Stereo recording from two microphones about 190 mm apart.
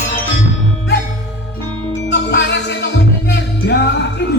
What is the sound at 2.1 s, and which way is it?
Music, 65° left (ahead or behind).